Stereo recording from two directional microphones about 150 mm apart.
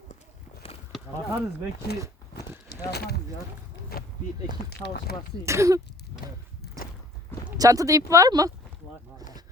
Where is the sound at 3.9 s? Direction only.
85° left.